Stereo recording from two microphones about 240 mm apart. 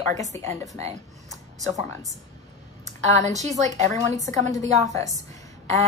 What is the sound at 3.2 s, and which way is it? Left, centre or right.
Speech, right.